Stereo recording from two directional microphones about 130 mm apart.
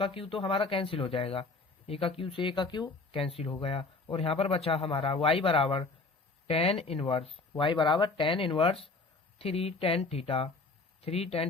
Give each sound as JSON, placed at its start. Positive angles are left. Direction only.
{"t": 0.0, "sound": "speech", "side_deg": 45}